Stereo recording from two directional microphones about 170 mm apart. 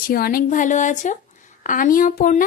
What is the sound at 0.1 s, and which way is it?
A woman's voice, 60° left (ahead or behind).